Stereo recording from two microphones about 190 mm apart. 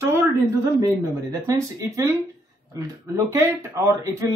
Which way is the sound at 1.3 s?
15° right (ahead or behind).